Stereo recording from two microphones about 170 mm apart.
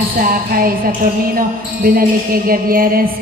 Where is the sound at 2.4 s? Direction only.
55° right (ahead or behind).